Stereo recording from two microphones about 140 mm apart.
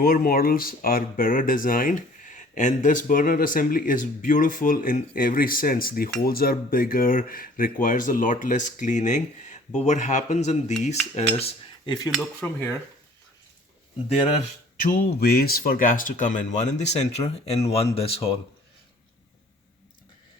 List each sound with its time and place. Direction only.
0.0 s speech: 90° left; by 10.8 s 55° left (ahead or behind)
10.8 s cutlery: 55° left (ahead or behind)
11.9 s cutlery: 30° left (ahead or behind)
12.4 s speech: 15° left (ahead or behind)
14.1 s cutlery: 45° left (ahead or behind)
14.8 s speech: 75° left (ahead or behind); by 17.8 s 45° left (ahead or behind)
18.0 s cutlery: 45° left (ahead or behind)